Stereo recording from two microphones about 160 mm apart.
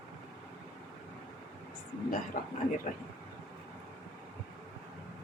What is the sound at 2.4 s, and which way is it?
Speech, 60° left (ahead or behind).